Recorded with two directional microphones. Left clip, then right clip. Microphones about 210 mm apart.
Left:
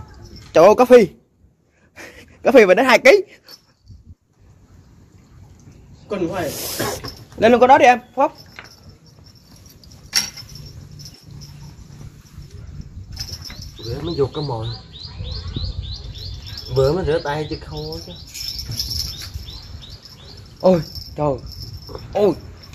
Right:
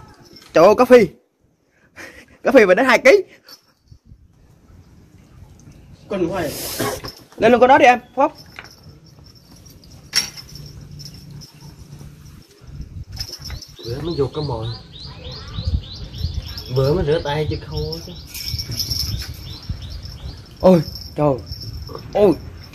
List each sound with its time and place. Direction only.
0.5 s speech: 10° left (ahead or behind)
2.0 s a sound: 20° left (ahead or behind)
6.0 s speech: 35° left (ahead or behind); by 8.3 s 10° left (ahead or behind)
14.0 s speech: 20° left (ahead or behind)
16.7 s speech: 25° left (ahead or behind)
20.6 s cricket: 15° right (ahead or behind)
22.1 s speech: 10° right (ahead or behind)